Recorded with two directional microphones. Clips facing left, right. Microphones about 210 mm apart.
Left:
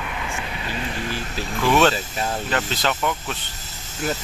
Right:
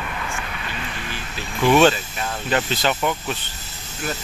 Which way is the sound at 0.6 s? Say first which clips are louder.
Left 4 dB; 35° left (ahead or behind).